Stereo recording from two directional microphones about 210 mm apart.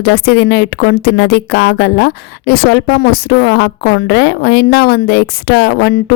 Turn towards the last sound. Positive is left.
turn(degrees=50)  # may be behind; listen again after turning